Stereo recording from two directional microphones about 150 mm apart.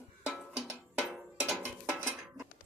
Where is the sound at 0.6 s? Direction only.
5° right (ahead or behind).